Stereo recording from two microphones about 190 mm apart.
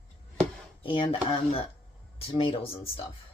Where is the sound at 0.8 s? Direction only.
30° left (ahead or behind).